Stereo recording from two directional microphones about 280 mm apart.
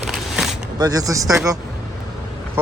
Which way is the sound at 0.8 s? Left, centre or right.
Centre.